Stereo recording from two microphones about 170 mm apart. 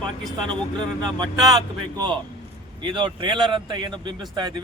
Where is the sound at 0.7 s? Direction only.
25° right (ahead or behind).